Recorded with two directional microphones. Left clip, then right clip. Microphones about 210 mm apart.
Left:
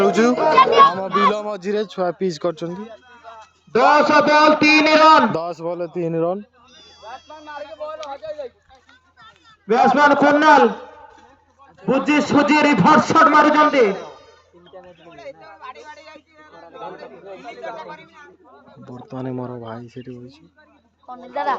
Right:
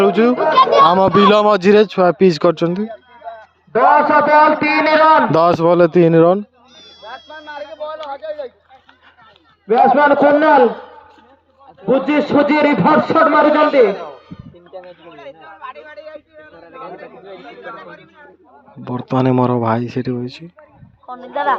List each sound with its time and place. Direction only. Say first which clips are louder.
0.0 s speech: right 3 dB; 5° right (ahead or behind)
0.3 s speech: right 2 dB; 45° left (ahead or behind)
0.6 s speech: right 4 dB; 45° right (ahead or behind); by 2.8 s 25° right (ahead or behind)
3.7 s a man's voice: right 3 dB; 55° left (ahead or behind)
5.3 s a sound: right 13 dB; 35° right (ahead or behind); by 8.5 s 15° right (ahead or behind)
9.6 s a man's voice: right 3 dB; 40° left (ahead or behind)
11.9 s a man's voice: right 3 dB; 45° left (ahead or behind)
14.7 s a sound: right 8 dB; 50° right (ahead or behind)
15.1 s a sound: left 1 dB; 10° right (ahead or behind); by 16.6 s 10° left (ahead or behind)
16.7 s chatter: right 2 dB; centre (ahead or behind)
17.4 s a sound: left 2 dB; 15° left (ahead or behind)
18.9 s speech: right 14 dB; 30° right (ahead or behind)